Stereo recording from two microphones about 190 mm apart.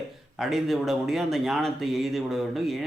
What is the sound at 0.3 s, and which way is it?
Speech, centre (ahead or behind).